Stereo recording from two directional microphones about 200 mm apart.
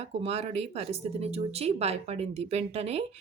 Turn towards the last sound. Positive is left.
turn(degrees=-30)  # may be behind; listen again after turning